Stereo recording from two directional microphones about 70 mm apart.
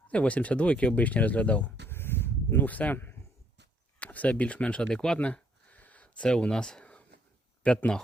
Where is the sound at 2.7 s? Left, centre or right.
Left.